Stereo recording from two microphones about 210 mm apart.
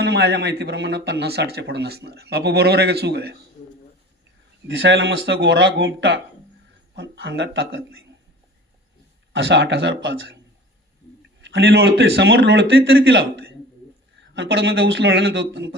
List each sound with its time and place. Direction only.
0.0 s speech: 50° right (ahead or behind)
4.8 s a man's voice: 65° right (ahead or behind)
9.3 s a man's voice: 60° right (ahead or behind)
11.3 s a man's voice: 60° right (ahead or behind)